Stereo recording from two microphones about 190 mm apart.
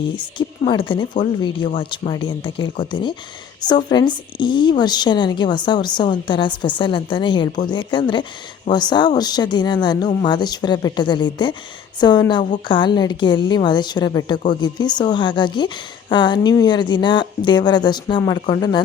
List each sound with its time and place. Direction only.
0.2 s speech: 25° left (ahead or behind)